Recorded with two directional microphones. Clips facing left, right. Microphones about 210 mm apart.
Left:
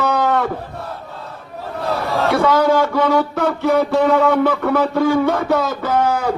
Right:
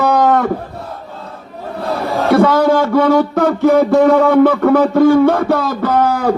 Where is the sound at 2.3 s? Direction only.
50° right (ahead or behind).